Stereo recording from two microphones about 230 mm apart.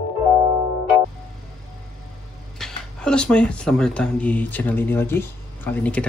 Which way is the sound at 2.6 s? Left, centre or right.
Centre.